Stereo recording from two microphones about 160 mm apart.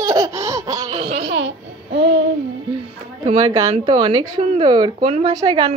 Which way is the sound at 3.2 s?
40° right (ahead or behind).